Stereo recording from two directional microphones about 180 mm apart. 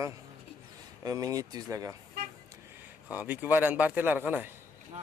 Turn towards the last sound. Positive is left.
turn(degrees=-10)  # may be behind; listen again after turning